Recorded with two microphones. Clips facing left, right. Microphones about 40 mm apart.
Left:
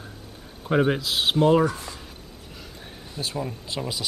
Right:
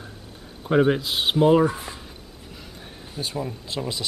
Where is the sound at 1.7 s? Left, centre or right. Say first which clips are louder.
Right 2 dB; right.